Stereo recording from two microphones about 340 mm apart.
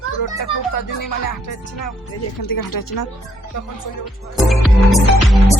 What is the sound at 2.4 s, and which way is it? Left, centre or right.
Speech, left.